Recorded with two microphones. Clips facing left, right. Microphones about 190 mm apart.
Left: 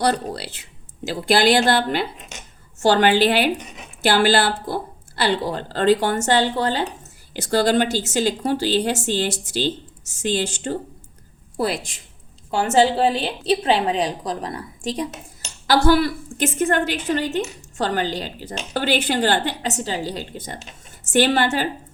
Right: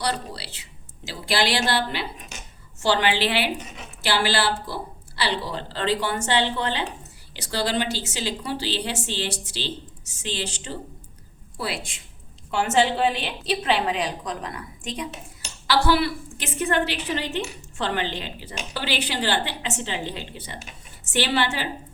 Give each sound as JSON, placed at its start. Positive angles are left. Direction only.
{"t": 0.0, "sound": "a woman's voice", "side_deg": 45}